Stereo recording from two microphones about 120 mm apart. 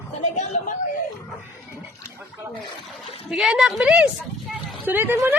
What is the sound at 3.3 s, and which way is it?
Speech, 5° right (ahead or behind).